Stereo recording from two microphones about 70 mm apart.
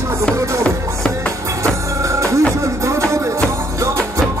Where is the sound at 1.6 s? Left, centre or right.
Right.